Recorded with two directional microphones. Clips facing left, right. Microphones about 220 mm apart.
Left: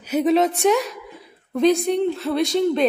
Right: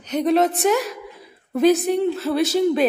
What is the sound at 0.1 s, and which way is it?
Speech, centre (ahead or behind).